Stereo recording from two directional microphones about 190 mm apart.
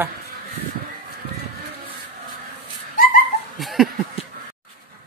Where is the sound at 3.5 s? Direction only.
Centre (ahead or behind).